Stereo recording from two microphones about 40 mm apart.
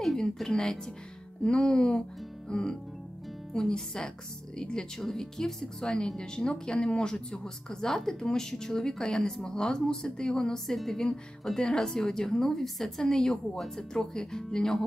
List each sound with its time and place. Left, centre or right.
0.2 s a woman's voice: centre
1.4 s music: centre
2.5 s a woman's voice: centre
3.5 s music: centre
4.6 s a woman's voice: centre